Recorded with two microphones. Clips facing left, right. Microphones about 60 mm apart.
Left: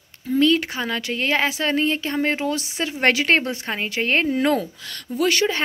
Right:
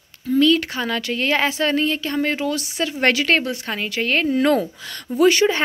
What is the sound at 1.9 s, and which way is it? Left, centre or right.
A woman's voice, left.